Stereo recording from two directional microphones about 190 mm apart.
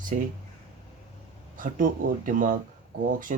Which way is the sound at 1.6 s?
45° right (ahead or behind).